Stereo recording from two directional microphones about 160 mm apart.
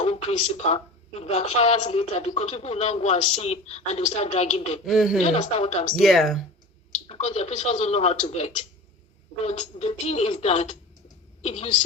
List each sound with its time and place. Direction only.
0.0 s a woman's voice: 40° left (ahead or behind)
4.9 s speech: centre (ahead or behind)
5.2 s a woman's voice: 45° left (ahead or behind)
5.9 s speech: centre (ahead or behind)
7.1 s speech: 40° left (ahead or behind)